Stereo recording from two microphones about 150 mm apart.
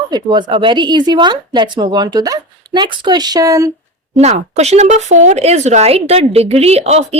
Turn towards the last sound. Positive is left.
turn(degrees=-45)  # may be behind; listen again after turning